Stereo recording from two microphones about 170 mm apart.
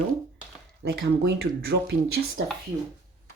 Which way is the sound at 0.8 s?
70° right (ahead or behind).